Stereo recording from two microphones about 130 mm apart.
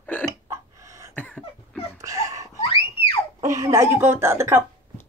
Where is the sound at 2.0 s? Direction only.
25° right (ahead or behind).